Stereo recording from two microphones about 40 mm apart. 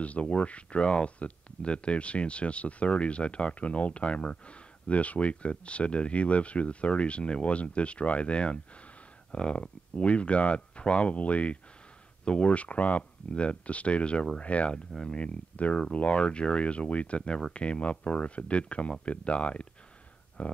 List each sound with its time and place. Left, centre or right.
0.0 s speech: left